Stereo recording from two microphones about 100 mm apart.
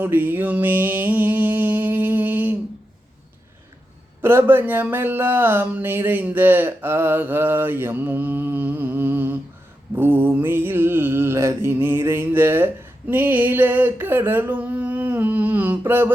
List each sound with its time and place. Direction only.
0.0 s mantra: 20° right (ahead or behind)
4.2 s mantra: 20° right (ahead or behind)